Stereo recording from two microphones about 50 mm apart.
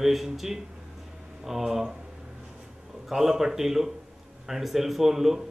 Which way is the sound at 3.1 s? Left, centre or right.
Centre.